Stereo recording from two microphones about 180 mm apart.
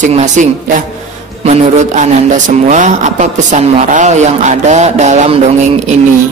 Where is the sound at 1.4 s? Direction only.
40° right (ahead or behind).